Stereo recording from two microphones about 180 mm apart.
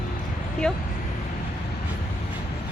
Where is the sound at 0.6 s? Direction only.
5° left (ahead or behind).